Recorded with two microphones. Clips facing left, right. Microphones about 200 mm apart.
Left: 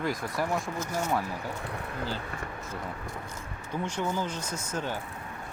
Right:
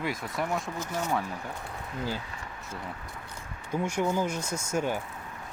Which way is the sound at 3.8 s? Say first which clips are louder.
Right 3 dB; 10° right (ahead or behind).